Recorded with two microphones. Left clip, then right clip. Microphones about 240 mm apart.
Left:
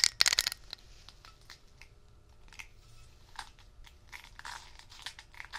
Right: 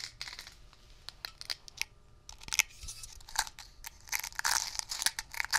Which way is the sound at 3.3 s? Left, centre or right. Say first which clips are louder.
Right 11 dB; right.